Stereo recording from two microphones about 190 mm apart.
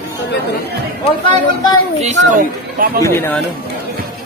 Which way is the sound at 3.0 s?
10° left (ahead or behind).